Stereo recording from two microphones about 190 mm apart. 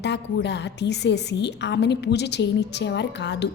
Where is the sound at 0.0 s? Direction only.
65° left (ahead or behind).